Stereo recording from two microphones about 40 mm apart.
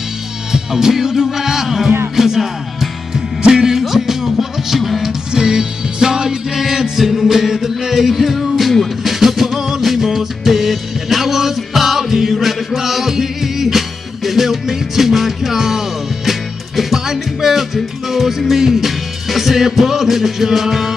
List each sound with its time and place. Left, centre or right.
0.5 s music: centre
5.3 s music: centre